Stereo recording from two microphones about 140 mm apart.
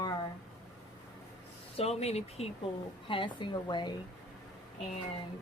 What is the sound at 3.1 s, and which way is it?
Speech, 35° left (ahead or behind).